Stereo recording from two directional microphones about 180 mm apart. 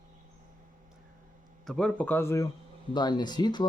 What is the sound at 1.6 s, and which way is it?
Speech, 5° left (ahead or behind).